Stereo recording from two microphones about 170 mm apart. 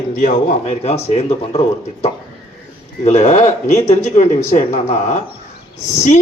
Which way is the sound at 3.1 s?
40° left (ahead or behind).